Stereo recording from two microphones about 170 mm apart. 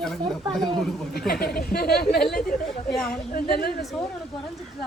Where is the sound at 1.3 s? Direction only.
65° left (ahead or behind).